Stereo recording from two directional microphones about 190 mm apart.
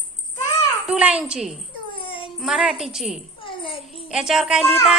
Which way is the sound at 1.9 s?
25° left (ahead or behind).